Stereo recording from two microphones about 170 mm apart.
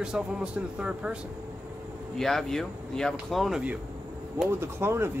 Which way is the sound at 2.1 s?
Centre (ahead or behind).